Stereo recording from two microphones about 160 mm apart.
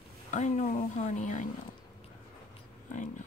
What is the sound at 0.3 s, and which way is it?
Speech, 45° left (ahead or behind).